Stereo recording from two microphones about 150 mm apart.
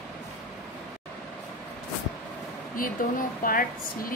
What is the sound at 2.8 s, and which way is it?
Speech, 70° left (ahead or behind).